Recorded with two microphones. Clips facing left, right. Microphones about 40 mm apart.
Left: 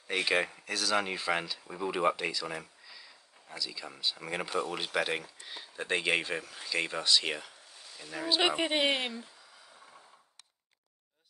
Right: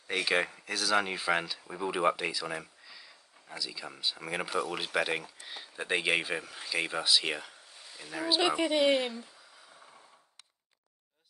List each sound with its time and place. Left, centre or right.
0.0 s speech: centre
8.4 s speech: left